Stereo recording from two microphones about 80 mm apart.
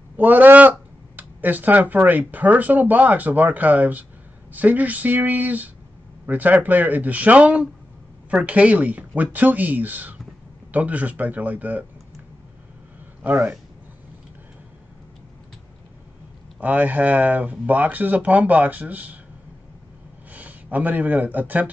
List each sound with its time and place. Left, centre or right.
0.2 s speech: right
16.5 s speech: centre
20.3 s speech: centre